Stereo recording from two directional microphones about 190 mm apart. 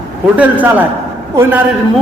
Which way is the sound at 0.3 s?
10° right (ahead or behind).